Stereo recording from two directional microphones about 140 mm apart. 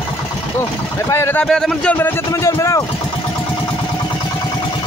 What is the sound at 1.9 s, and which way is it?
Speech, 20° left (ahead or behind).